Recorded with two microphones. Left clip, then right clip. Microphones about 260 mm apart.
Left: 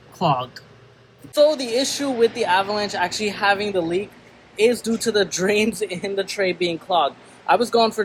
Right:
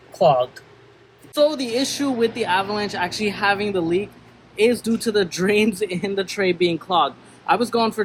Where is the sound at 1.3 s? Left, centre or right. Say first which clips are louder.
Left 2 dB; centre.